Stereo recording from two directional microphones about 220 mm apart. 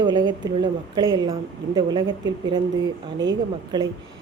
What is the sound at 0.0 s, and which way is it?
Speech, 20° right (ahead or behind).